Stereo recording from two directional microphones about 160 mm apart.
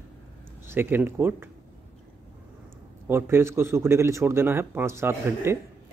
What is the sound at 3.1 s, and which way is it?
A man's voice, 15° right (ahead or behind).